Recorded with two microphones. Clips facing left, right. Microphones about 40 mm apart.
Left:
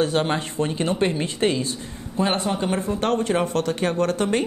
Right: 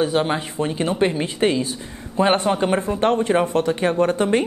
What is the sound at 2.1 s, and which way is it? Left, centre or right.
A man's voice, right.